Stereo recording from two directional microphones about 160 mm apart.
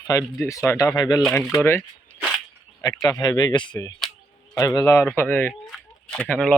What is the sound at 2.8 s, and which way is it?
Speech, 25° left (ahead or behind).